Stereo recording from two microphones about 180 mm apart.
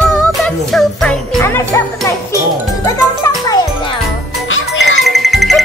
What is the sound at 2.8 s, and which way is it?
Music, 20° left (ahead or behind).